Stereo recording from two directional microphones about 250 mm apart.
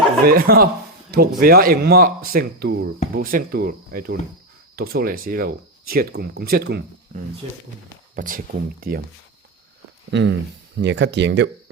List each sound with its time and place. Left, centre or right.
0.3 s speech: right
8.1 s speech: right
10.1 s speech: right